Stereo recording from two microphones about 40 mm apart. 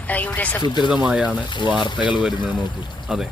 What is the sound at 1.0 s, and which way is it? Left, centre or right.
Speech, right.